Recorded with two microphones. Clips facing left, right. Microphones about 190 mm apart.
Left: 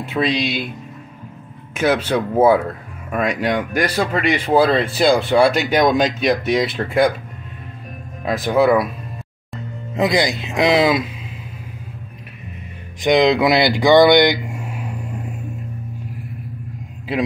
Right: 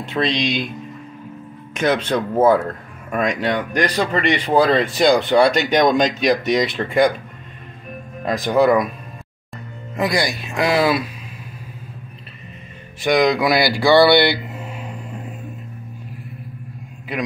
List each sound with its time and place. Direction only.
0.0 s speech: 5° left (ahead or behind)
1.7 s speech: 5° left (ahead or behind)
8.3 s speech: 5° left (ahead or behind)
9.9 s speech: 20° left (ahead or behind)
13.0 s speech: 20° left (ahead or behind)